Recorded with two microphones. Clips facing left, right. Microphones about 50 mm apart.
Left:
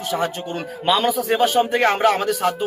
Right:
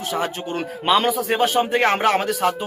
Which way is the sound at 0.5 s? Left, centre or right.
Right.